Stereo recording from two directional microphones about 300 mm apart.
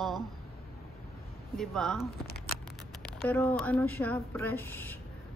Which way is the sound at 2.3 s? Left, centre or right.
Left.